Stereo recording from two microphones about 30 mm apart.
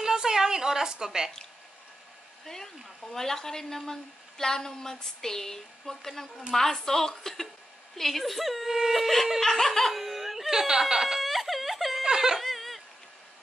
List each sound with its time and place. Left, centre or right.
0.0 s a sound: centre
2.4 s a woman's voice: centre
8.6 s speech: centre
9.4 s a woman's voice: centre
10.0 s laughter: centre
10.5 s speech: centre
11.1 s a sound: centre
12.0 s whimper: centre
12.4 s a sound: centre